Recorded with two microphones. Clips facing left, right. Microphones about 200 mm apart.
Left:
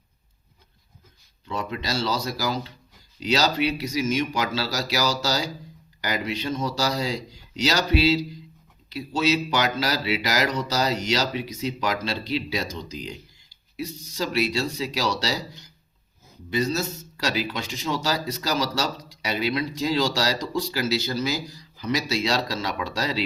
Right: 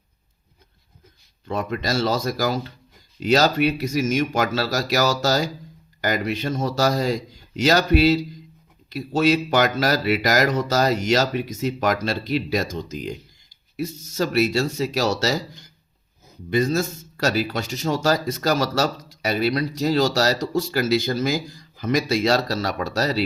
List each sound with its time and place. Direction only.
1.5 s speech: 50° right (ahead or behind)